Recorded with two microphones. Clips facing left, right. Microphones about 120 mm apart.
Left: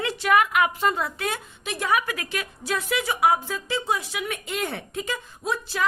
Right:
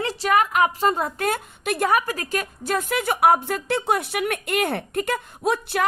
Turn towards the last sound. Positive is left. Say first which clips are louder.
# right 5 dB
turn(degrees=-60)  # may be behind; listen again after turning